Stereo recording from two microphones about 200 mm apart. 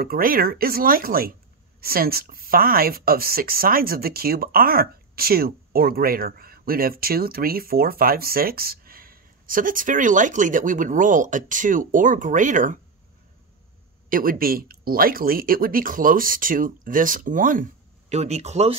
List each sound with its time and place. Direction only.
0.0 s speech: 45° right (ahead or behind)
14.0 s speech: 45° right (ahead or behind)